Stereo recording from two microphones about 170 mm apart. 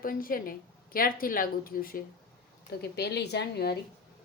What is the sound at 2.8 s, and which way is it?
Speech, 80° left.